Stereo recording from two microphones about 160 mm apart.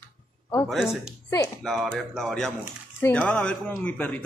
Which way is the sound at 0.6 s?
Centre (ahead or behind).